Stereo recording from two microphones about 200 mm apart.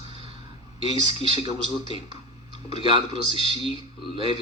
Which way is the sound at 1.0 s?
25° right (ahead or behind).